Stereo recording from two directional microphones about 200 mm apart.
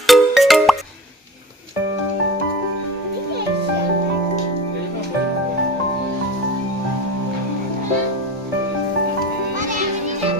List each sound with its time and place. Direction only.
0.1 s music: centre (ahead or behind)
9.6 s music: 40° right (ahead or behind)